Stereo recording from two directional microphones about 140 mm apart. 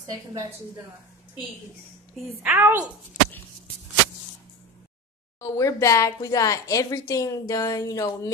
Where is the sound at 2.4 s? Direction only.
15° right (ahead or behind).